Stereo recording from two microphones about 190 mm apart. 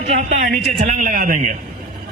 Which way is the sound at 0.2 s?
45° right (ahead or behind).